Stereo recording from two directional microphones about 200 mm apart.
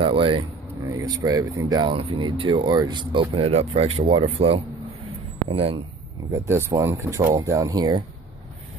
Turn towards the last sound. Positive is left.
turn(degrees=-20)  # may be behind; listen again after turning